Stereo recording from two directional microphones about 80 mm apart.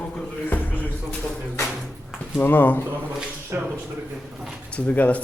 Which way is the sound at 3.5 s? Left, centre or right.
Right.